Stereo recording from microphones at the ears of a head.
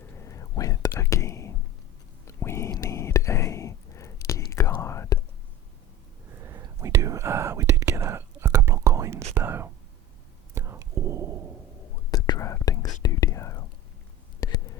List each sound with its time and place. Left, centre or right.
0.0 s whispering: left
6.2 s whispering: right
11.8 s whispering: left
14.4 s a sound: left